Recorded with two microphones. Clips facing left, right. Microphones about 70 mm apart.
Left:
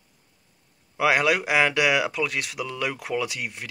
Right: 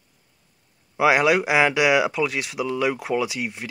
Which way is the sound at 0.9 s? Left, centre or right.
Centre.